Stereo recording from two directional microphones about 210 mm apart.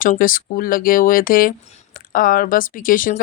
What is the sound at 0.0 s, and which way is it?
Speech, 40° left (ahead or behind).